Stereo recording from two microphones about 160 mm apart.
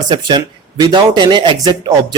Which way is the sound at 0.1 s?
30° right (ahead or behind).